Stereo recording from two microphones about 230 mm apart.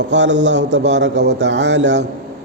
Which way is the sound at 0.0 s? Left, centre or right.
Right.